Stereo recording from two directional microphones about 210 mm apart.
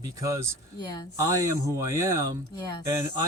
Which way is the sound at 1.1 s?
15° right (ahead or behind).